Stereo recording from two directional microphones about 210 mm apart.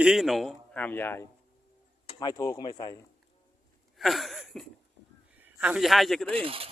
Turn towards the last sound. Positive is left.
turn(degrees=-25)  # may be behind; listen again after turning